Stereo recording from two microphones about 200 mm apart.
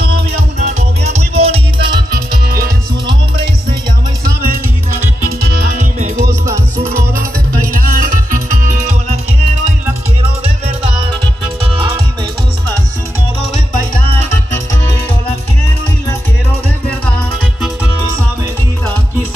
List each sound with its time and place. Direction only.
0.6 s music: 35° right (ahead or behind)
2.4 s music: 50° right (ahead or behind)
5.4 s music: 45° right (ahead or behind)
6.4 s music: 15° right (ahead or behind)
7.7 s music: 45° right (ahead or behind)